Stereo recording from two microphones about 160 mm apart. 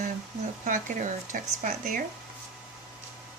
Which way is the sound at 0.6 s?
55° right (ahead or behind).